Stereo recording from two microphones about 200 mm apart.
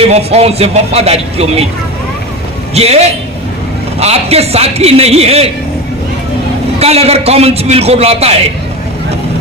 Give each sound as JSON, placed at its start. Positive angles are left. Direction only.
{"t": 0.0, "sound": "speech", "side_deg": -30}
{"t": 2.7, "sound": "speech", "side_deg": -30}
{"t": 6.7, "sound": "speech", "side_deg": -30}